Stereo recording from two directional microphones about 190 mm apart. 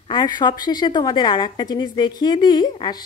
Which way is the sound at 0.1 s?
25° left (ahead or behind).